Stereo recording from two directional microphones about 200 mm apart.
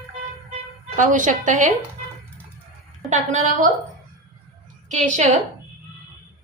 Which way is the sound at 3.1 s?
35° right (ahead or behind).